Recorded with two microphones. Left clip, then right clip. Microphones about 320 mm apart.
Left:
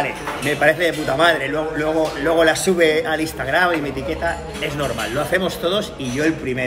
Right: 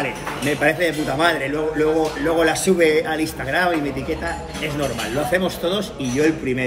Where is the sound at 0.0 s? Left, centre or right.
Centre.